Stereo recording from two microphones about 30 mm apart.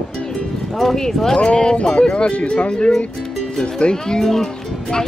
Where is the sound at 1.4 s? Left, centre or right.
Left.